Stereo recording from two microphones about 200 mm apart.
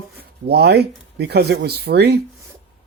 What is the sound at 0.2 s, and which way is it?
Speech, 50° right (ahead or behind).